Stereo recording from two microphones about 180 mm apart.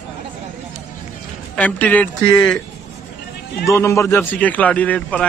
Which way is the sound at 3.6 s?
15° left (ahead or behind).